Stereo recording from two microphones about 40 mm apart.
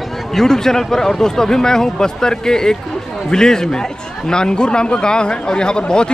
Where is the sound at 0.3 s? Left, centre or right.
Centre.